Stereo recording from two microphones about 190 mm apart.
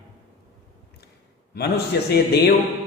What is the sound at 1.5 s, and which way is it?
Speech, 60° left (ahead or behind).